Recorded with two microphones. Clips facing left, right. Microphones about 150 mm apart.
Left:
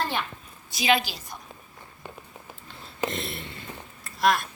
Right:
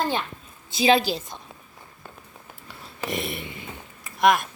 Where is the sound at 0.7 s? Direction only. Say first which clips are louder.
Right 5 dB; 30° right (ahead or behind).